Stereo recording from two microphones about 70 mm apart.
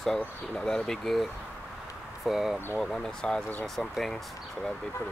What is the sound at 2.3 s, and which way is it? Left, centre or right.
Speech, centre.